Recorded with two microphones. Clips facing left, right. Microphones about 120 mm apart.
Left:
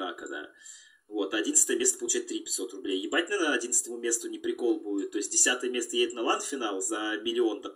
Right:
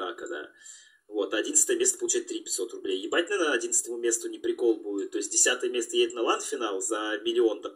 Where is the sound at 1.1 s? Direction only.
25° right (ahead or behind).